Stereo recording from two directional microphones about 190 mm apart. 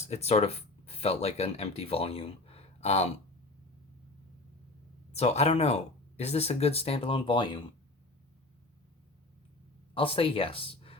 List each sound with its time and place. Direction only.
0.1 s speech: 35° left (ahead or behind)
5.1 s speech: 35° left (ahead or behind)
9.9 s speech: 30° left (ahead or behind)